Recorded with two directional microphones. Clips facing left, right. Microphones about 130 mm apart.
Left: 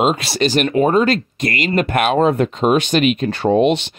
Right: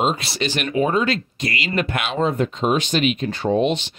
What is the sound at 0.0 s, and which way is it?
Speech, 90° left.